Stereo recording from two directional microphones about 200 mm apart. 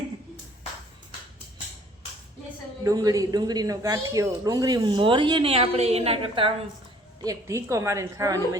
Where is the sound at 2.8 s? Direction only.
20° right (ahead or behind).